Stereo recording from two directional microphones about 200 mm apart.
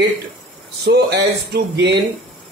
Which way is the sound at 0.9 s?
55° right (ahead or behind).